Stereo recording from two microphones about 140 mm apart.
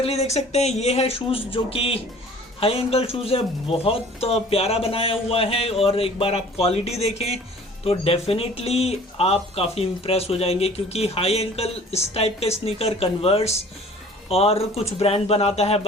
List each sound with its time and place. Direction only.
0.0 s speech: 50° left (ahead or behind)